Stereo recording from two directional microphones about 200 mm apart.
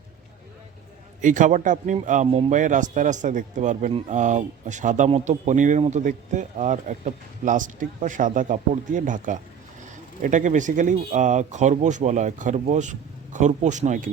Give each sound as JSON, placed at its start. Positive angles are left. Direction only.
{"t": 1.2, "sound": "speech", "side_deg": -40}